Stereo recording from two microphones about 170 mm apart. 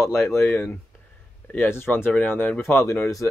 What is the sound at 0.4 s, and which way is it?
Speech, 10° left (ahead or behind).